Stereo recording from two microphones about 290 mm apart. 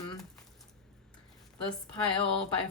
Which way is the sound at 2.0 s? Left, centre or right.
Centre.